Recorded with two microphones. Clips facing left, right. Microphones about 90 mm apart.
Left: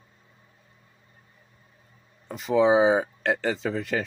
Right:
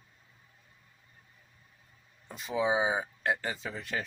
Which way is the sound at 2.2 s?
90° left.